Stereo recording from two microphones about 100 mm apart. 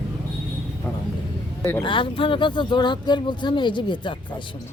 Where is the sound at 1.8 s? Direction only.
55° left (ahead or behind).